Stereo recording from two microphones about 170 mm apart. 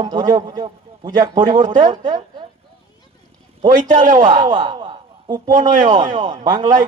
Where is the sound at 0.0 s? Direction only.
25° right (ahead or behind).